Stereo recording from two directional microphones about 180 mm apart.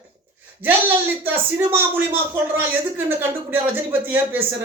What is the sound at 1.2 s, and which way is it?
Speech, 10° right (ahead or behind).